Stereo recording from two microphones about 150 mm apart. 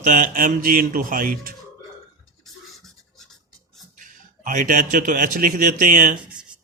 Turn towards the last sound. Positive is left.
turn(degrees=-65)  # may be behind; listen again after turning